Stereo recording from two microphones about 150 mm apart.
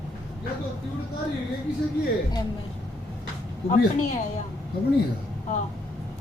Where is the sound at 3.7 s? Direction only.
50° left (ahead or behind).